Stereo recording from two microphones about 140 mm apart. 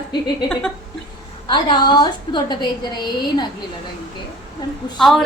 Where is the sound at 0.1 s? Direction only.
30° left (ahead or behind).